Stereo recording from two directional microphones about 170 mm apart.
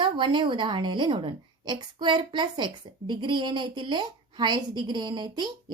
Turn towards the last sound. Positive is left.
turn(degrees=-25)  # may be behind; listen again after turning